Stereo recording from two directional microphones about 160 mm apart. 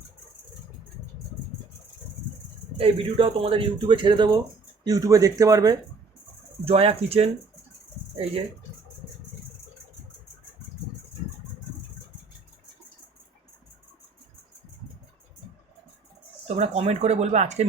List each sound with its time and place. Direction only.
2.7 s speech: 35° right (ahead or behind)
6.7 s speech: 35° right (ahead or behind)
16.6 s speech: 40° right (ahead or behind)